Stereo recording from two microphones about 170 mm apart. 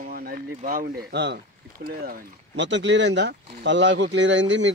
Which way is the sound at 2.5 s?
90° right.